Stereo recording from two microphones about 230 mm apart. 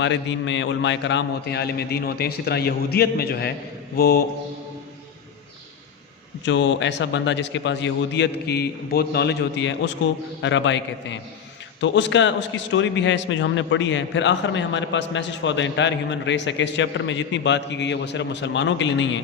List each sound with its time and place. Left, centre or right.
0.0 s a man's voice: left
3.9 s mantra: left
6.4 s a man's voice: left